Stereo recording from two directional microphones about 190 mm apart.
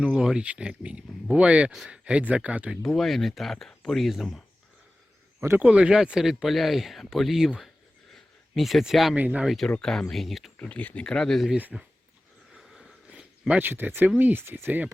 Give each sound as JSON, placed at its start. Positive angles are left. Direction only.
{"t": 0.0, "sound": "speech", "side_deg": -5}